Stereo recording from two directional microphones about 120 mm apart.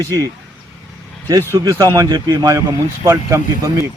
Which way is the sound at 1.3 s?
30° right (ahead or behind).